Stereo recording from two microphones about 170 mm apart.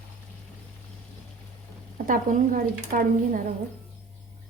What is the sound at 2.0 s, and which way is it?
Speech, 50° right (ahead or behind).